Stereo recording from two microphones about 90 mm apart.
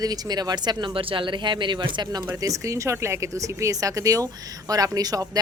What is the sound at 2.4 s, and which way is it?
Speech, 40° right (ahead or behind).